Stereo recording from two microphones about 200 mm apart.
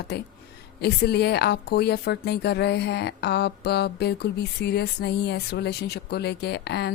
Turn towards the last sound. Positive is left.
turn(degrees=55)  # may be behind; listen again after turning